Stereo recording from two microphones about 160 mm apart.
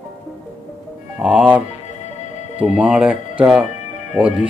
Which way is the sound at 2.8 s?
5° right (ahead or behind).